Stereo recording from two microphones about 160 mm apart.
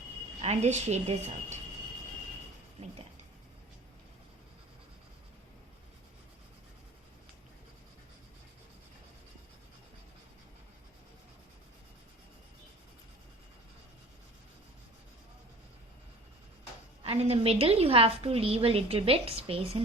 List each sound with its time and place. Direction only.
0.4 s a woman's voice: 45° right (ahead or behind)
17.0 s a woman's voice: 40° right (ahead or behind)